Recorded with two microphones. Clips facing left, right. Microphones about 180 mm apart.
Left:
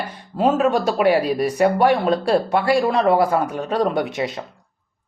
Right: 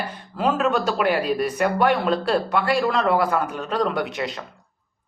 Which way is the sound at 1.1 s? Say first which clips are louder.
Left 3 dB; 30° left (ahead or behind).